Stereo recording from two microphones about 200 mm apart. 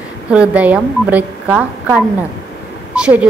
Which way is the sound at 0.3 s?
5° right (ahead or behind).